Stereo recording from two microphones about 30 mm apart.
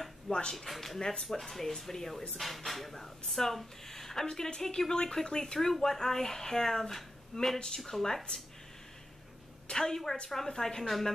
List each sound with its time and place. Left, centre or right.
0.3 s speech: centre
0.7 s speech: centre; by 5.6 s left
5.6 s speech: centre
9.7 s a woman's voice: left; by 11.1 s centre